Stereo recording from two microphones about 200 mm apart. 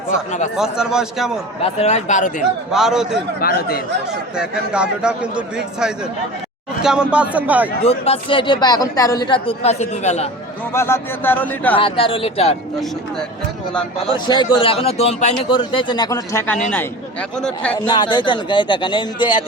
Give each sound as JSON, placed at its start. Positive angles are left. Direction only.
{"t": 0.5, "sound": "a man's voice", "side_deg": -5}
{"t": 1.6, "sound": "speech", "side_deg": 35}
{"t": 2.7, "sound": "a man's voice", "side_deg": 0}
{"t": 3.4, "sound": "speech", "side_deg": 50}
{"t": 4.4, "sound": "a man's voice", "side_deg": -5}
{"t": 7.9, "sound": "speech", "side_deg": 30}
{"t": 10.7, "sound": "speech", "side_deg": 15}
{"t": 11.8, "sound": "speech", "side_deg": 25}
{"t": 14.1, "sound": "a man's voice", "side_deg": 20}
{"t": 17.7, "sound": "speech", "side_deg": 20}